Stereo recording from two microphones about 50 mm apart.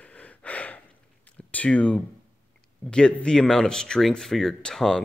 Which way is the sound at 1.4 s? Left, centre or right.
Left.